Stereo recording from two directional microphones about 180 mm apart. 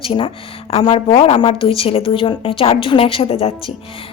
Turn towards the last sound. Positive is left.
turn(degrees=30)  # may be behind; listen again after turning